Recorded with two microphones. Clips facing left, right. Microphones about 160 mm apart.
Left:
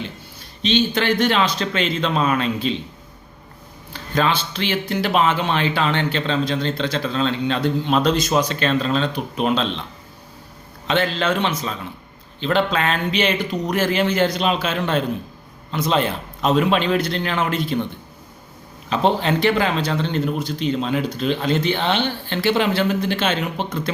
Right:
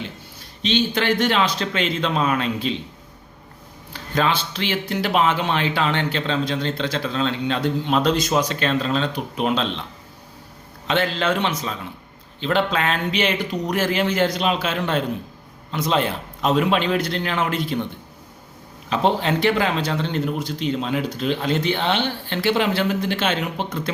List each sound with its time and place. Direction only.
0.6 s speech: 10° right (ahead or behind)
3.9 s speech: 10° right (ahead or behind)
10.8 s speech: 10° right (ahead or behind)
18.9 s speech: 10° right (ahead or behind)